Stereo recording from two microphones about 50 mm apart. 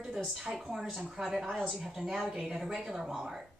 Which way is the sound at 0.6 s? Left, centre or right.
Centre.